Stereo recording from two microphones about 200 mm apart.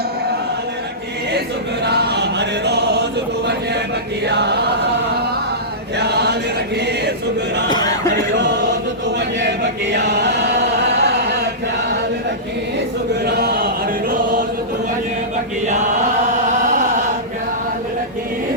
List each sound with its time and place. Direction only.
1.8 s choir: 55° right (ahead or behind)
4.3 s chant: 55° right (ahead or behind)
6.0 s chant: 55° right (ahead or behind)
7.7 s a sound: 20° left (ahead or behind)
8.1 s choir: 60° right (ahead or behind)
9.0 s chant: 60° right (ahead or behind)
13.2 s chant: 50° right (ahead or behind)
14.1 s choir: 45° right (ahead or behind)
16.3 s chant: 35° right (ahead or behind)